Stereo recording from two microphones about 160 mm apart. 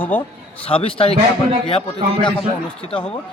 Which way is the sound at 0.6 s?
35° left (ahead or behind).